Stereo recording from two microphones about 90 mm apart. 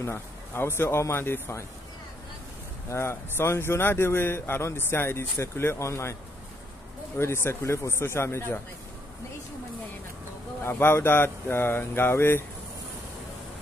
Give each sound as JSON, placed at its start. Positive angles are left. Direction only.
{"t": 0.0, "sound": "speech", "side_deg": 25}
{"t": 2.9, "sound": "speech", "side_deg": 30}
{"t": 7.2, "sound": "speech", "side_deg": 30}
{"t": 10.6, "sound": "speech", "side_deg": 25}